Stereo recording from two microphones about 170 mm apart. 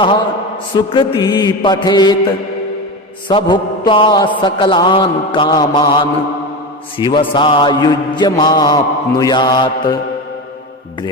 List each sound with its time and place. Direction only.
0.9 s mantra: 25° left (ahead or behind)
3.2 s mantra: 30° left (ahead or behind)